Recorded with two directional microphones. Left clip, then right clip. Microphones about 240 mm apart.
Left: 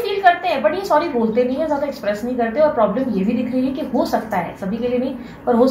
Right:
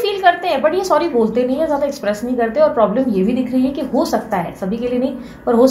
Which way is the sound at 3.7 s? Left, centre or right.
Right.